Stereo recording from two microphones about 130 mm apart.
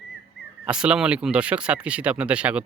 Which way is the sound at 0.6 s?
5° right (ahead or behind).